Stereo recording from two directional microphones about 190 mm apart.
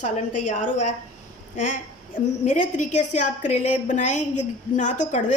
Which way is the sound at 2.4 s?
40° left (ahead or behind).